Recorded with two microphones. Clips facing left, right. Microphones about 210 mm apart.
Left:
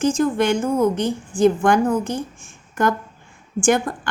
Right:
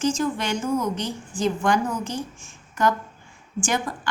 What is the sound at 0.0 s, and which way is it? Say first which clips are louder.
A woman's voice: left 6 dB; 55° left (ahead or behind).